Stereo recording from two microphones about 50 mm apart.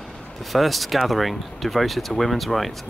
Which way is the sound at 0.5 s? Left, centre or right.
Centre.